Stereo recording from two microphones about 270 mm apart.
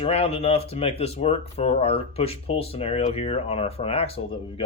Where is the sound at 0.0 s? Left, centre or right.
Left.